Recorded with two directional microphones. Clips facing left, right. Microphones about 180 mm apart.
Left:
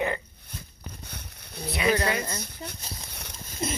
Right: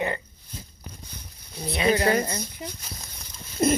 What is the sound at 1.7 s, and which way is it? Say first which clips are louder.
Speech: right 2 dB; 30° right (ahead or behind).